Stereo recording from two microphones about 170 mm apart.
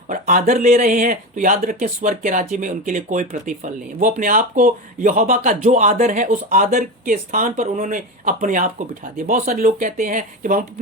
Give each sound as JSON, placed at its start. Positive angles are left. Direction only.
{"t": 0.1, "sound": "speech", "side_deg": -50}